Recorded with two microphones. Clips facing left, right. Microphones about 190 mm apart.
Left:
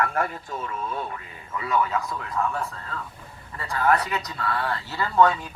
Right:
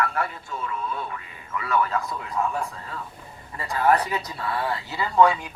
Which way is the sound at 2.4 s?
15° right (ahead or behind).